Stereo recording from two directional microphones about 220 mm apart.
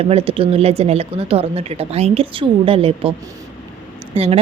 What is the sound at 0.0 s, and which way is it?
A woman's voice, 25° right (ahead or behind).